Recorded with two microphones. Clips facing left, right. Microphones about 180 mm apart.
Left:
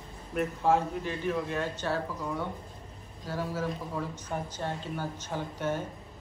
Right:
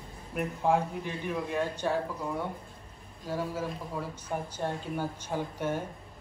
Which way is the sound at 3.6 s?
10° right (ahead or behind).